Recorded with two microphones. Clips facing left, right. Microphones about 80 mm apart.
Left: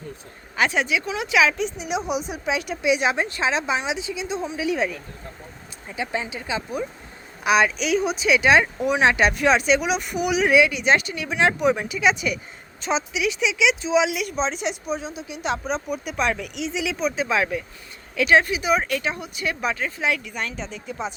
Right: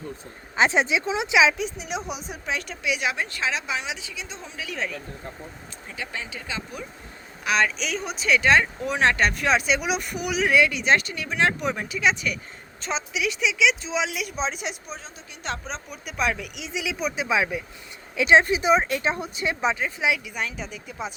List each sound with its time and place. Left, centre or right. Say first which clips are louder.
0.5 s speech: right 1 dB; right
1.5 s speech: left 4 dB; centre
2.8 s speech: left 6 dB; left
6.0 s speech: left 7 dB; left; by 17.6 s centre
18.2 s speech: even; right
19.8 s speech: even; centre